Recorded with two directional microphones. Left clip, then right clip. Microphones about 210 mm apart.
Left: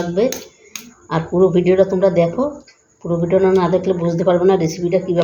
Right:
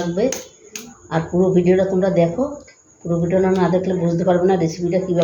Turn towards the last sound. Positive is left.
turn(degrees=45)  # may be behind; listen again after turning